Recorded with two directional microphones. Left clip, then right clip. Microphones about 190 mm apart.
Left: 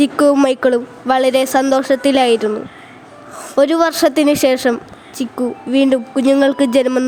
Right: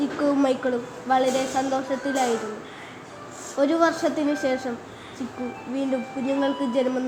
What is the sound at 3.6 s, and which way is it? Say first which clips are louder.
A woman's voice: left 9 dB; 65° left (ahead or behind).